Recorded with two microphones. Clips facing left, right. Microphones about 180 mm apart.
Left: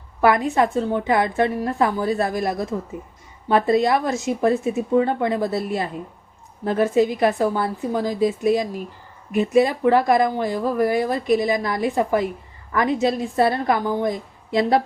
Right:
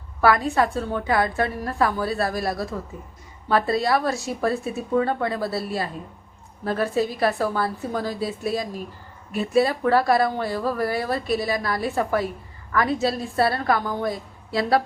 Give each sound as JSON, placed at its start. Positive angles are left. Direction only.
{"t": 0.2, "sound": "a woman's voice", "side_deg": 20}